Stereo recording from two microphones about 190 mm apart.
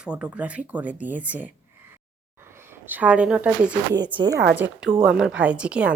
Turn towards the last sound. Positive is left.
turn(degrees=-5)  # may be behind; listen again after turning